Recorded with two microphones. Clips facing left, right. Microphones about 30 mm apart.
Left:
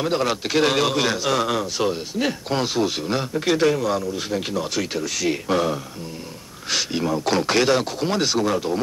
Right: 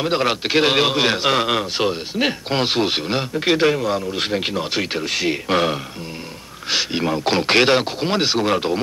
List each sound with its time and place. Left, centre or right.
0.0 s speech: right
4.3 s speech: right
6.7 s speech: right
8.5 s speech: right